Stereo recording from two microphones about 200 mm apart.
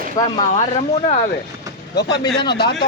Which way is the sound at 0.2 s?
20° left (ahead or behind).